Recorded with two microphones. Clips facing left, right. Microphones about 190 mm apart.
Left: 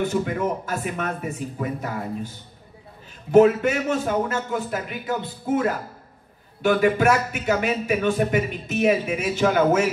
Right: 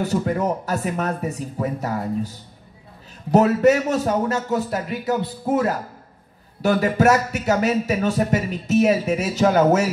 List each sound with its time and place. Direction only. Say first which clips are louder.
0.0 s a man's voice: right 2 dB; 40° right (ahead or behind)